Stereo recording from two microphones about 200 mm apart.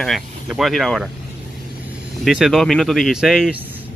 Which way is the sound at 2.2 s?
Centre (ahead or behind).